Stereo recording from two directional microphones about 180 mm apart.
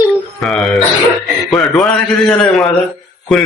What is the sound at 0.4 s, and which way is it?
A man's voice, centre (ahead or behind).